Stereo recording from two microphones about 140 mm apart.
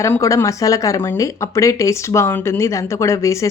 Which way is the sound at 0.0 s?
20° left (ahead or behind).